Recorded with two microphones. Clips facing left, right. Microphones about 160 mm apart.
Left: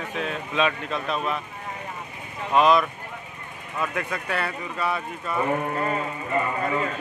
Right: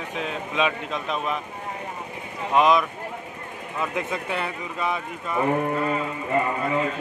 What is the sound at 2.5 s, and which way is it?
Speech, 15° right (ahead or behind).